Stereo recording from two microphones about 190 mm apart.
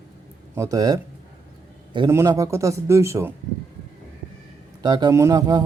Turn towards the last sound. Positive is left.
turn(degrees=-20)  # may be behind; listen again after turning